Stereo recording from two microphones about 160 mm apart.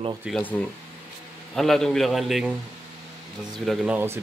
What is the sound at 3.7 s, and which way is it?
Speech, 10° right (ahead or behind).